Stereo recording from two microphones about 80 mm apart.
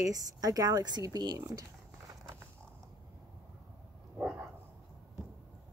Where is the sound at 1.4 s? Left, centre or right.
Right.